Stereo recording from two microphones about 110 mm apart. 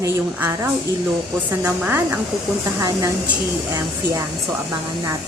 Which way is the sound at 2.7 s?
30° right (ahead or behind).